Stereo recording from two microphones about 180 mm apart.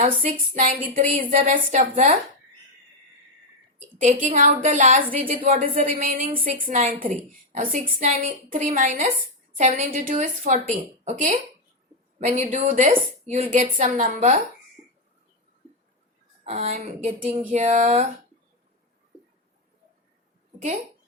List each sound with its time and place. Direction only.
0.0 s a woman's voice: 45° right (ahead or behind)
3.8 s a woman's voice: 45° right (ahead or behind)
16.4 s speech: 35° right (ahead or behind)